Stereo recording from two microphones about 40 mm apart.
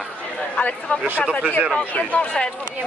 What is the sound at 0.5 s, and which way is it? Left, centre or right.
Speech, left.